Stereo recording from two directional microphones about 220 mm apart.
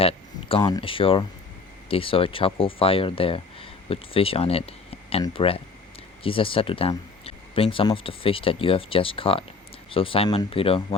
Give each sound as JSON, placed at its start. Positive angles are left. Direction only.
{"t": 0.0, "sound": "speech", "side_deg": 25}